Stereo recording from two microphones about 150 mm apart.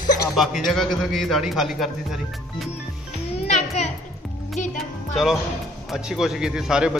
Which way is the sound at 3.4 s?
50° left (ahead or behind).